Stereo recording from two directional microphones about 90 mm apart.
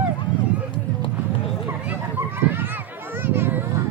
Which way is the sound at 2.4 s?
25° right (ahead or behind).